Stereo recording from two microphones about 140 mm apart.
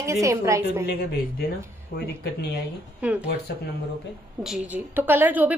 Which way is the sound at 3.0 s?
10° right (ahead or behind).